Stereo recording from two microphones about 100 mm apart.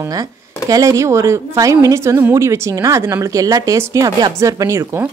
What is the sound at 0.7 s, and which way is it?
A woman's voice, 35° right (ahead or behind).